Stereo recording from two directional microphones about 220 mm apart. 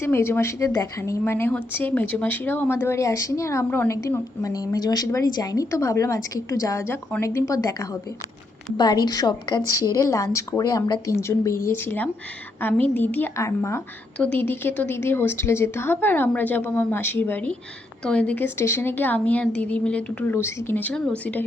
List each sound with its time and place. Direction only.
0.0 s a woman's voice: 10° left (ahead or behind)